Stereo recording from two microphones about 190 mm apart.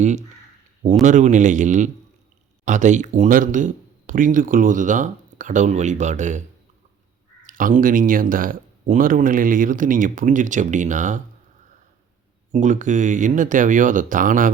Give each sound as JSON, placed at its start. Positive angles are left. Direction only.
{"t": 0.0, "sound": "speech", "side_deg": -40}
{"t": 7.4, "sound": "speech", "side_deg": -45}
{"t": 12.5, "sound": "speech", "side_deg": -40}